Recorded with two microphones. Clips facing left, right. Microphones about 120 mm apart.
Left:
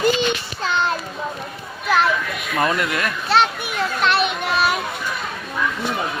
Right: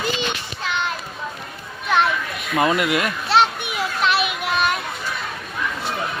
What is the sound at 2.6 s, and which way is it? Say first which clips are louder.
Speech: right 2 dB; 20° right (ahead or behind).